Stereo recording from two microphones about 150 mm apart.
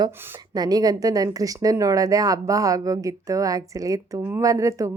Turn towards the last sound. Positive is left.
turn(degrees=-20)  # may be behind; listen again after turning